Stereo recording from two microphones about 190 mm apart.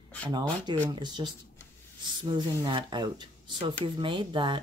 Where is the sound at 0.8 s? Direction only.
20° right (ahead or behind).